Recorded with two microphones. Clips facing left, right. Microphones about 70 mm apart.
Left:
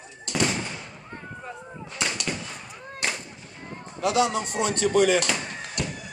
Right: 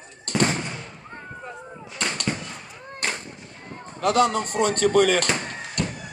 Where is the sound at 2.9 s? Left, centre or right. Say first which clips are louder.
Right 1 dB; right.